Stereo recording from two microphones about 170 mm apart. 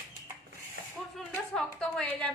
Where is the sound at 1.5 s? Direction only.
5° left (ahead or behind).